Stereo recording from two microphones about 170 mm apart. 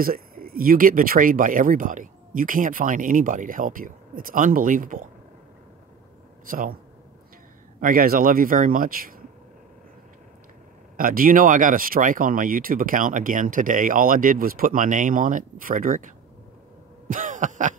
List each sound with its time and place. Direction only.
0.0 s speech: 60° right (ahead or behind)
6.5 s speech: 55° right (ahead or behind)
7.8 s speech: 55° right (ahead or behind)
11.0 s speech: 55° right (ahead or behind)
17.1 s speech: 50° right (ahead or behind)